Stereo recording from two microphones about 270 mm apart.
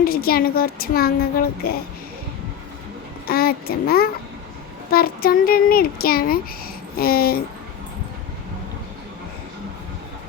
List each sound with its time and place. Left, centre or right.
0.0 s child singing: left
3.2 s child singing: left